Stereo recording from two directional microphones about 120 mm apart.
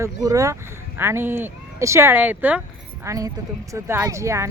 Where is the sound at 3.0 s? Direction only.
30° right (ahead or behind).